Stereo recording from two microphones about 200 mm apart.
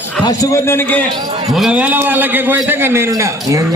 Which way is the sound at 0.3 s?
15° left (ahead or behind).